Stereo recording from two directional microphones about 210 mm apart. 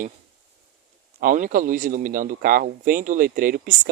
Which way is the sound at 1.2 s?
40° right (ahead or behind).